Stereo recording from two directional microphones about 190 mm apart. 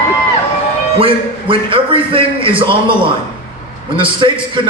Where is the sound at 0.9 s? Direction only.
30° right (ahead or behind).